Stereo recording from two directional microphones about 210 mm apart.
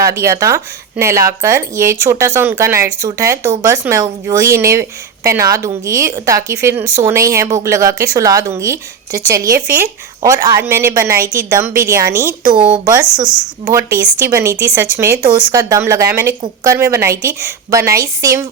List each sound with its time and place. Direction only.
0.0 s speech: 15° right (ahead or behind)